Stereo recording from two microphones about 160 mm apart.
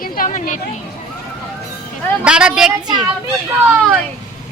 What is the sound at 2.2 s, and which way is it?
Speech, 5° right (ahead or behind).